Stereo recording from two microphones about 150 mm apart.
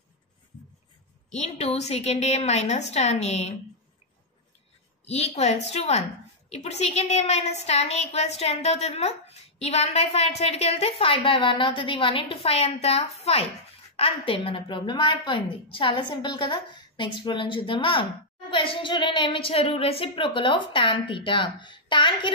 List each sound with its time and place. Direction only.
1.3 s a woman's voice: 45° left (ahead or behind)
5.0 s a woman's voice: 45° left (ahead or behind)